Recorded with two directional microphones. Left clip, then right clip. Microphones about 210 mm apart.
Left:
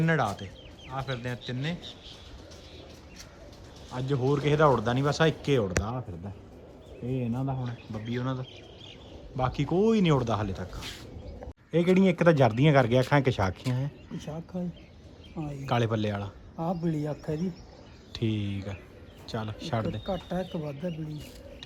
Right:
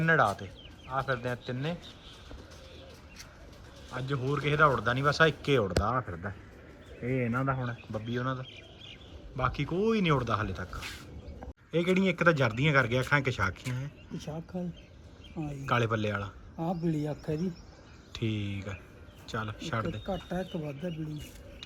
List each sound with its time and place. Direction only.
0.0 s a man's voice: 10° left (ahead or behind)
3.9 s a man's voice: 15° left (ahead or behind)
7.3 s a man's voice: centre (ahead or behind); by 13.6 s 20° left (ahead or behind)
14.2 s speech: centre (ahead or behind)
15.6 s a man's voice: 15° left (ahead or behind)
18.1 s a man's voice: 15° left (ahead or behind)